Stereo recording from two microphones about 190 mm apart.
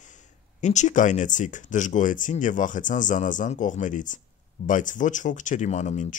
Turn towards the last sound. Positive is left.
turn(degrees=40)  # may be behind; listen again after turning